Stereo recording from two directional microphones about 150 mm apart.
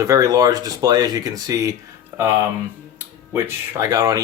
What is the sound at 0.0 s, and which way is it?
Speech, 20° right (ahead or behind).